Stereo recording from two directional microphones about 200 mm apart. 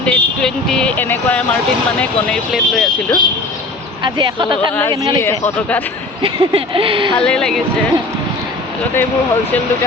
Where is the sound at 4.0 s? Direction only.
25° right (ahead or behind).